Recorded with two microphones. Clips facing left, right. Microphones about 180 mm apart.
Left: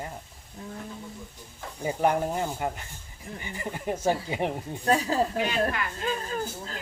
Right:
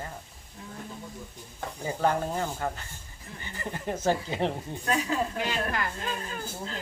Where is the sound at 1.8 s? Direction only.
15° left (ahead or behind).